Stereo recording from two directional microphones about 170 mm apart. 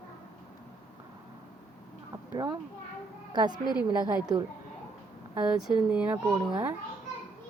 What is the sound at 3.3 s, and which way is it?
Speech, 25° right (ahead or behind).